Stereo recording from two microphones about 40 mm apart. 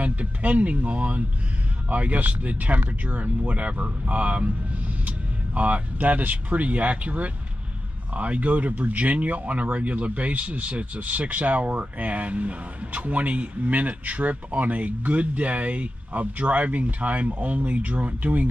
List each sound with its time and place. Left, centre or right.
0.0 s speech: right